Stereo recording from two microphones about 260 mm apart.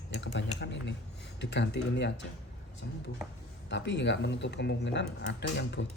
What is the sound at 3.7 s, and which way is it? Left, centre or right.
Speech, left.